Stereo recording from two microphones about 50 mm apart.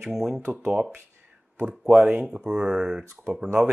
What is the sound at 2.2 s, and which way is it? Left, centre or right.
Speech, centre.